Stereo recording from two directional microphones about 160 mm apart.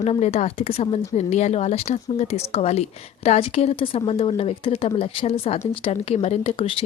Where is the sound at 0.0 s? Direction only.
45° left (ahead or behind).